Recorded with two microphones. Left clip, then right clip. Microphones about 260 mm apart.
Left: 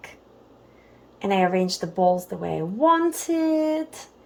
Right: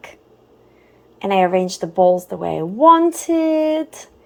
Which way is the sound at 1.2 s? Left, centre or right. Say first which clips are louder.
Right 6 dB; centre.